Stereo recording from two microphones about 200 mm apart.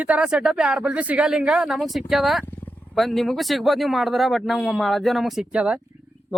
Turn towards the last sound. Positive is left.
turn(degrees=-5)  # may be behind; listen again after turning